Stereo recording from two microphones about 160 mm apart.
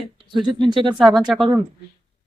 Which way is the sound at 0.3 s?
30° right (ahead or behind).